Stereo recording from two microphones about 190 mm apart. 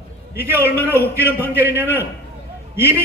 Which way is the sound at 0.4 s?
10° right (ahead or behind).